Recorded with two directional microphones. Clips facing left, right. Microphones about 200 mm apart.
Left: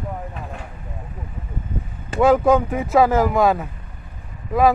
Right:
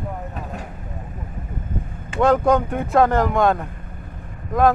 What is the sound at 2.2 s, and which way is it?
Speech, 5° left (ahead or behind).